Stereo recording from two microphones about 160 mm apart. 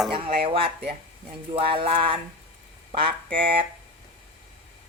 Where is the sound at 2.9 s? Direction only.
35° right (ahead or behind).